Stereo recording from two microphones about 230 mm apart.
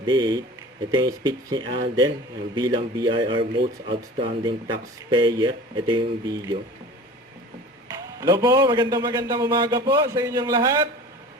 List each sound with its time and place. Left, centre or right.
0.0 s speech: centre
8.2 s a man's voice: centre